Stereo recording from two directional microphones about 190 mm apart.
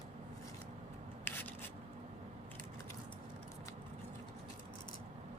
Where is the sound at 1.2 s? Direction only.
10° left (ahead or behind).